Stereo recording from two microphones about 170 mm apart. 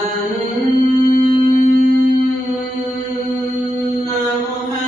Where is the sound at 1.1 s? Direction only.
55° left (ahead or behind).